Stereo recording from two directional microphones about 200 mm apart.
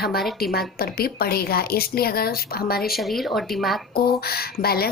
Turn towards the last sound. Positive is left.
turn(degrees=50)  # may be behind; listen again after turning